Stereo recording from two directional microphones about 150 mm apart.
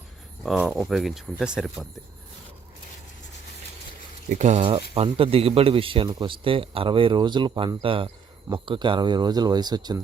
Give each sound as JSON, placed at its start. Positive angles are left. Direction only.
{"t": 0.4, "sound": "speech", "side_deg": -5}
{"t": 4.3, "sound": "a man's voice", "side_deg": -50}